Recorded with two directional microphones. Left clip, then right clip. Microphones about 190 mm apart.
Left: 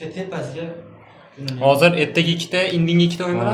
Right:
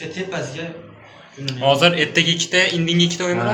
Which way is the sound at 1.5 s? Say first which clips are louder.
Left 1 dB; 45° left (ahead or behind).